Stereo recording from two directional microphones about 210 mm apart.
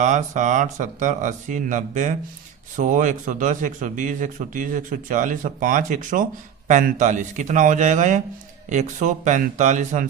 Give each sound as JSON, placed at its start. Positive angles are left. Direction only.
{"t": 0.0, "sound": "a man's voice", "side_deg": -35}